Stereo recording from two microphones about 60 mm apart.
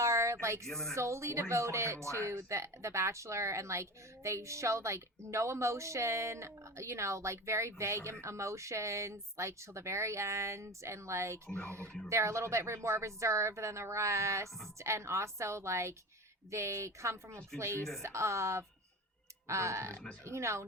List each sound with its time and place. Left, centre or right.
0.0 s a sound: right
0.6 s speech: centre
0.9 s a woman's voice: right